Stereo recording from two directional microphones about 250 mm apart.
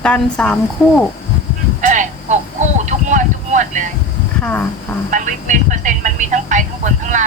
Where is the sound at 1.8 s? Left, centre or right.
Right.